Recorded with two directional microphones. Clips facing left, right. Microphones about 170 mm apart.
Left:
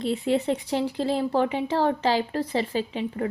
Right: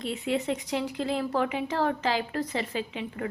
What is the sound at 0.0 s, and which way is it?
Speech, 30° left (ahead or behind).